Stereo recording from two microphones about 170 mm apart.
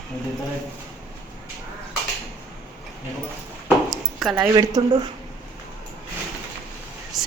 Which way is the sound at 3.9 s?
Centre (ahead or behind).